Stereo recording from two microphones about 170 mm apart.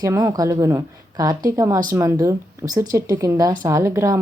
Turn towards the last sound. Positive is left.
turn(degrees=-15)  # may be behind; listen again after turning